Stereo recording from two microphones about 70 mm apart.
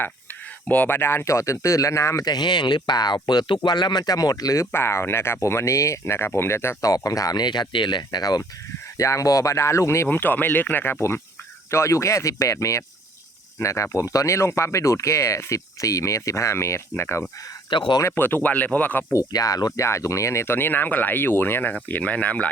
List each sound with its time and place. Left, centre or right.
0.7 s speech: left
1.2 s speech: left
2.2 s speech: left
6.9 s speech: left
9.0 s speech: left
10.1 s speech: left
11.7 s speech: left
17.7 s speech: left
18.1 s speech: left
19.1 s speech: left
19.8 s speech: left